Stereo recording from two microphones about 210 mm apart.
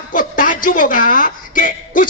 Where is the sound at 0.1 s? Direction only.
40° left (ahead or behind).